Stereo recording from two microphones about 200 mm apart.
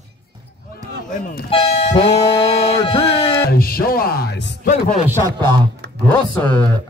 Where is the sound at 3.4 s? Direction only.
50° left (ahead or behind).